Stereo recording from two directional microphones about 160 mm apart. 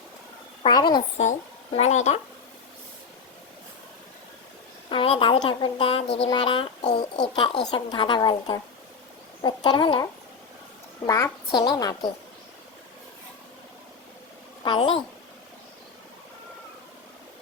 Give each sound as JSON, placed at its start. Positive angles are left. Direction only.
{"t": 0.7, "sound": "a woman's voice", "side_deg": 25}
{"t": 1.2, "sound": "speech", "side_deg": 45}
{"t": 4.9, "sound": "speech", "side_deg": 35}
{"t": 9.6, "sound": "speech", "side_deg": 30}
{"t": 11.0, "sound": "a woman's voice", "side_deg": 20}
{"t": 14.6, "sound": "a woman's voice", "side_deg": 30}